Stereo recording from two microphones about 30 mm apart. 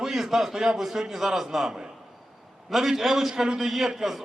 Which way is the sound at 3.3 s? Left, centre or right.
Right.